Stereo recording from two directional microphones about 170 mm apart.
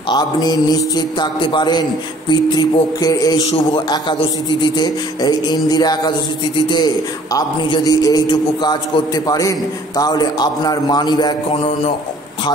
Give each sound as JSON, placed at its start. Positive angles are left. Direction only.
{"t": 0.1, "sound": "a man's voice", "side_deg": 25}